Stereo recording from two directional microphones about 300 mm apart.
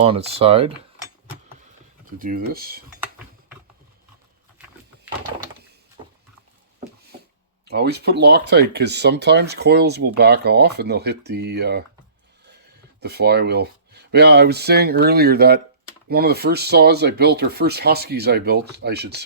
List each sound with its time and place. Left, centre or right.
0.0 s speech: centre
2.1 s speech: right
7.7 s speech: right
13.0 s speech: right